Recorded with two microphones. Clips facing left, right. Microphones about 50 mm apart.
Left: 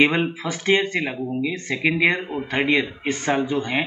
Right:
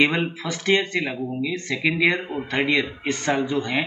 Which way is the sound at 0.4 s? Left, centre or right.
Centre.